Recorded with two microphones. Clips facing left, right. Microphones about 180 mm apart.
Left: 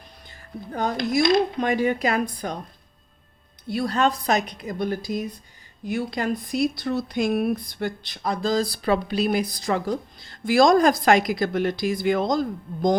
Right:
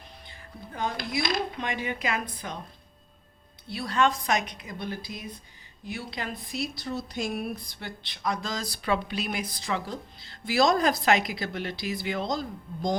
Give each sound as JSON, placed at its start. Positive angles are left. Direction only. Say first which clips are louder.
{"t": 0.3, "sound": "music", "louder": "left 9 dB", "side_deg": 40}
{"t": 1.0, "sound": "a woman's voice", "louder": "left 13 dB", "side_deg": 45}
{"t": 3.7, "sound": "a woman's voice", "louder": "left 4 dB", "side_deg": 45}